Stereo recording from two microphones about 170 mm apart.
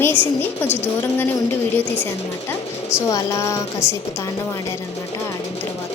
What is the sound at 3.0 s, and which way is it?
Speech, 20° left (ahead or behind).